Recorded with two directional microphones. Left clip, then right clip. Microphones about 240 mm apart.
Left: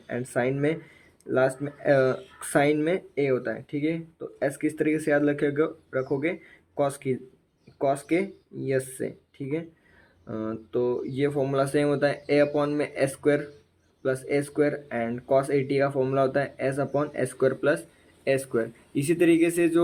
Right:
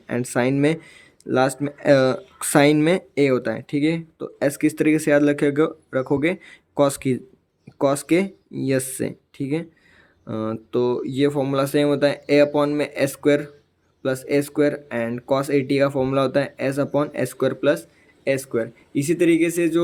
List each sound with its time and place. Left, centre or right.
0.1 s speech: right